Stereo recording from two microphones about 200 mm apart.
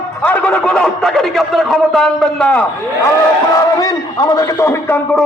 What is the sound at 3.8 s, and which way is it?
A man's voice, 15° left (ahead or behind).